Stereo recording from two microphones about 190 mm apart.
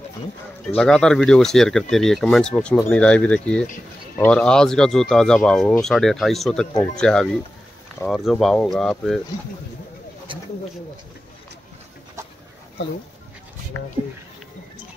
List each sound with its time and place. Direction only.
0.7 s speech: 5° left (ahead or behind)